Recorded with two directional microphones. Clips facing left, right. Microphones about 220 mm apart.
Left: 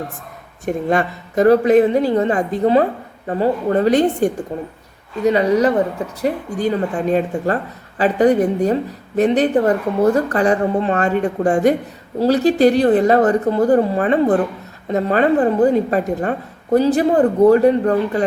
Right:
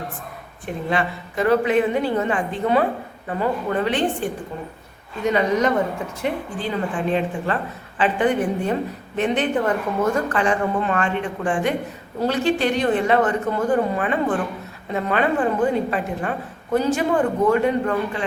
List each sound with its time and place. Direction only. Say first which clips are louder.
0.6 s speech: left 6 dB; 45° left (ahead or behind)